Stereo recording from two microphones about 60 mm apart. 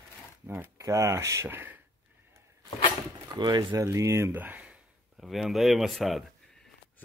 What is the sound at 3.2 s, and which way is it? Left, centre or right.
Speech, right.